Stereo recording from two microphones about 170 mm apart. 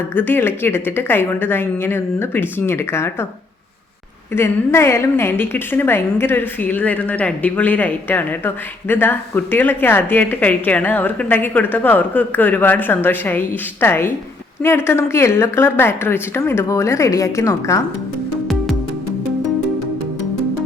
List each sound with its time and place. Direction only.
0.1 s a woman's voice: 10° left (ahead or behind)
4.3 s a woman's voice: 15° left (ahead or behind)